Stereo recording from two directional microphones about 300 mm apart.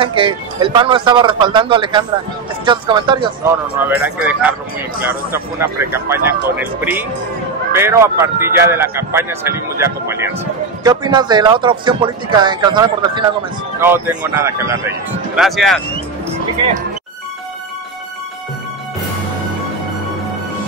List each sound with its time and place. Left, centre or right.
0.0 s a man's voice: centre
3.9 s a man's voice: centre